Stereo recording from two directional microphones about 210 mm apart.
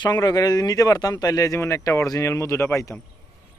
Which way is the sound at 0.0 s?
20° left (ahead or behind).